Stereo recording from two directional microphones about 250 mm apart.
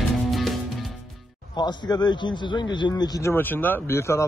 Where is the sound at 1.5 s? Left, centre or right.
Centre.